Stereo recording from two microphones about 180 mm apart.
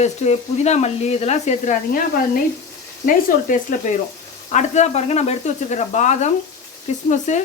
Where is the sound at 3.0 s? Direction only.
45° left (ahead or behind).